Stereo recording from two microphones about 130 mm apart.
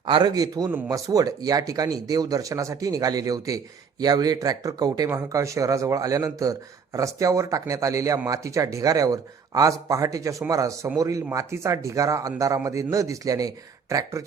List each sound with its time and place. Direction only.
0.1 s a man's voice: 30° right (ahead or behind)